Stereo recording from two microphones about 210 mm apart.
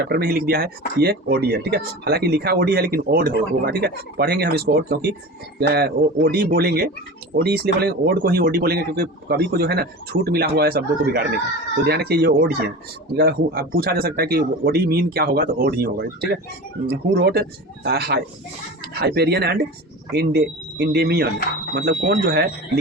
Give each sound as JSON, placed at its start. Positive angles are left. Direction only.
{"t": 0.0, "sound": "speech", "side_deg": -50}